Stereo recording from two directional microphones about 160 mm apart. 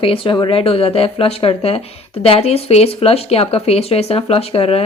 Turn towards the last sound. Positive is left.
turn(degrees=35)  # may be behind; listen again after turning